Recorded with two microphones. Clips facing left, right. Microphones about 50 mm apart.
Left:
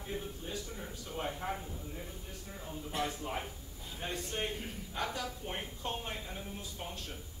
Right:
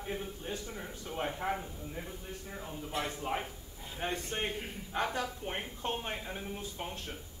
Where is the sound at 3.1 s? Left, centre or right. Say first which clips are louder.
Right 3 dB; right.